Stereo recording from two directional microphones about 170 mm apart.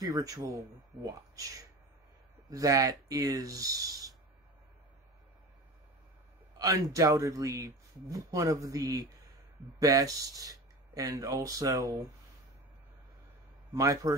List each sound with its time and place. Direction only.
0.0 s a man's voice: 20° right (ahead or behind)
6.6 s a man's voice: 20° right (ahead or behind)
13.7 s a man's voice: 20° right (ahead or behind)